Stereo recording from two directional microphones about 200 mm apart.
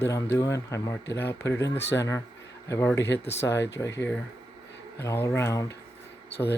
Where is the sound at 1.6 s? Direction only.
60° left (ahead or behind).